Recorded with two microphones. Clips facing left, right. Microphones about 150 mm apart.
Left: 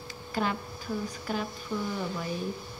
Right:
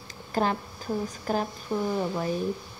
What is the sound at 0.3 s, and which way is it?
Speech, 40° right (ahead or behind).